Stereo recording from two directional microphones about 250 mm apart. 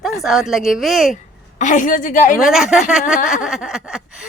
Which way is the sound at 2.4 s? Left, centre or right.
Centre.